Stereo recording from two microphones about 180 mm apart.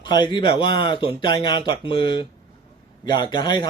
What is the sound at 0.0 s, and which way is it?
Speech, 25° left (ahead or behind).